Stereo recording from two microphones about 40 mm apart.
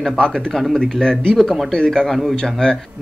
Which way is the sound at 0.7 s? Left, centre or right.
Centre.